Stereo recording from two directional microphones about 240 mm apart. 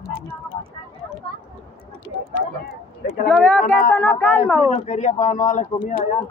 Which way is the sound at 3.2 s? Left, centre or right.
Centre.